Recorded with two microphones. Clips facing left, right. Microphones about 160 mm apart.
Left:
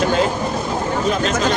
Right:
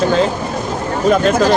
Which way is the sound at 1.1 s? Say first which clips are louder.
Right 10 dB; 55° right (ahead or behind).